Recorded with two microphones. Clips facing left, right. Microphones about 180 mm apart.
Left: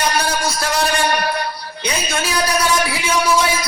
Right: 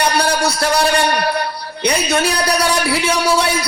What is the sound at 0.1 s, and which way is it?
Music, 65° right (ahead or behind).